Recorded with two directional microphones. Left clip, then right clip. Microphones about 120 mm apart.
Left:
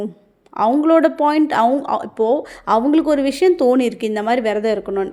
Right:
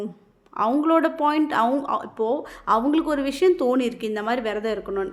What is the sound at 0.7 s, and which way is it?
A woman's voice, 35° left (ahead or behind).